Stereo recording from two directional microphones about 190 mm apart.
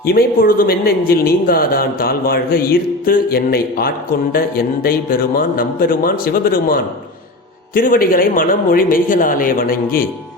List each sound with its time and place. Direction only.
0.0 s a man's voice: 55° left (ahead or behind)